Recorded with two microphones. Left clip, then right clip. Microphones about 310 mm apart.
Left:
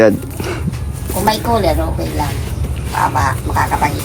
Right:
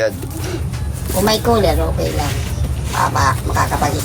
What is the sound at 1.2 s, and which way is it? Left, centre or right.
Speech, right.